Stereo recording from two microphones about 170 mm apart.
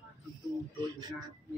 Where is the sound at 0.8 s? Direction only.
25° right (ahead or behind).